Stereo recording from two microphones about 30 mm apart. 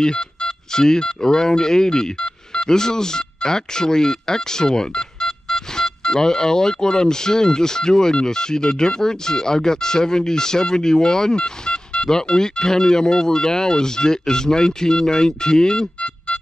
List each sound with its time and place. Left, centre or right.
0.0 s speech: left